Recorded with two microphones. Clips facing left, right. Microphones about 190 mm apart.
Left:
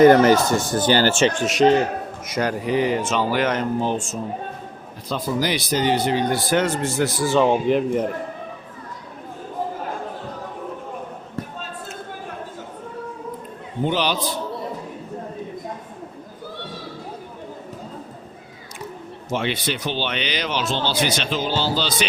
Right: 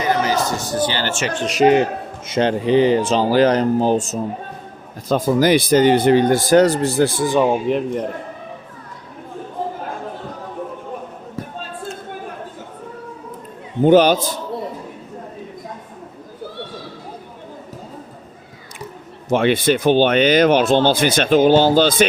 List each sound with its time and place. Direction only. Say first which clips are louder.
0.0 s speech: left 7 dB; 55° left (ahead or behind); by 1.3 s 35° left (ahead or behind)
1.5 s speech: right 4 dB; centre (ahead or behind)
1.7 s a man's voice: right 3 dB; 20° right (ahead or behind)
7.3 s speech: right 1 dB; 10° right (ahead or behind)
13.8 s speech: right 11 dB; 50° right (ahead or behind)
19.3 s speech: right 9 dB; 55° right (ahead or behind)